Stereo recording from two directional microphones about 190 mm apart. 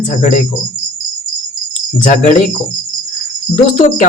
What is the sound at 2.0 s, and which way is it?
Speech, 40° left (ahead or behind).